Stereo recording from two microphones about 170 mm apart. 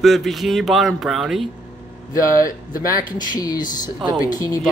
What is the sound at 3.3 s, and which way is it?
Speech, 25° left (ahead or behind).